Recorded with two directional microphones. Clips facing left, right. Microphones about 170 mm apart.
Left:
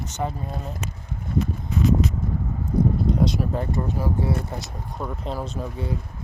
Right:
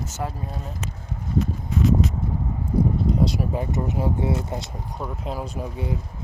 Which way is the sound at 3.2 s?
10° right (ahead or behind).